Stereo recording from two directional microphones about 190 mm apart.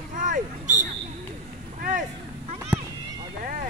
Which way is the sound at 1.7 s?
40° right (ahead or behind).